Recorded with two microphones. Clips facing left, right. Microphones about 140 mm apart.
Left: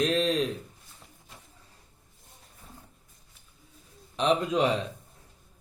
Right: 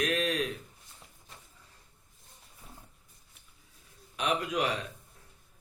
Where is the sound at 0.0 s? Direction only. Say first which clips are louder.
Left 5 dB; 30° left (ahead or behind).